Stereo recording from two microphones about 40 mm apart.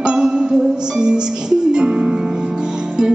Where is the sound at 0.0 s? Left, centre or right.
Centre.